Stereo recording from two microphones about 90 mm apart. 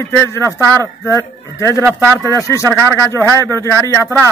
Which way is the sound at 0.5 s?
40° right (ahead or behind).